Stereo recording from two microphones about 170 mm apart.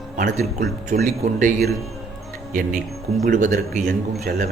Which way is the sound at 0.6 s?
65° right (ahead or behind).